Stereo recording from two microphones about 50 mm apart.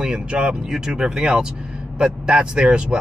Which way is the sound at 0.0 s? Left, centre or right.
Centre.